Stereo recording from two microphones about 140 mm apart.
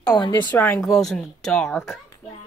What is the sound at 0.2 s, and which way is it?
Speech, 30° left (ahead or behind).